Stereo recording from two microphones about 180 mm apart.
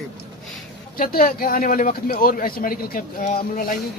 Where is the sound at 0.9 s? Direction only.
55° left (ahead or behind).